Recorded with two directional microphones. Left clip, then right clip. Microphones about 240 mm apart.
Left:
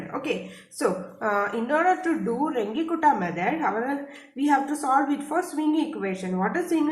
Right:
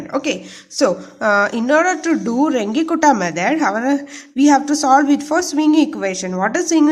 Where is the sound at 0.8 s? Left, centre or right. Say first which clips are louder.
Right 9 dB; right.